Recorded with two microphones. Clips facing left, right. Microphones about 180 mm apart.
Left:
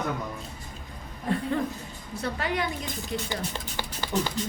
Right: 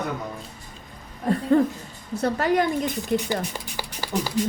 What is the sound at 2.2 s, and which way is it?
Speech, 45° right (ahead or behind).